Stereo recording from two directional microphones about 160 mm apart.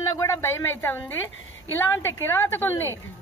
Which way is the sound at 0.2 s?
15° left (ahead or behind).